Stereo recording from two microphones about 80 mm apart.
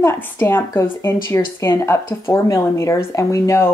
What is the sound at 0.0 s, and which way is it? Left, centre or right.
Speech, left.